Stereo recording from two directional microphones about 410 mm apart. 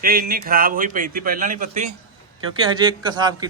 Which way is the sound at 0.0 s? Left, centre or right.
Right.